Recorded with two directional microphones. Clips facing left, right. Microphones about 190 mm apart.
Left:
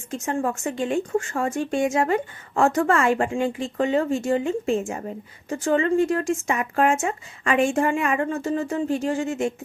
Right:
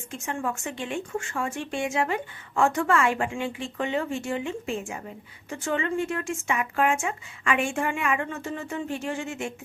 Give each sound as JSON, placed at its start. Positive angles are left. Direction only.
{"t": 0.1, "sound": "speech", "side_deg": 40}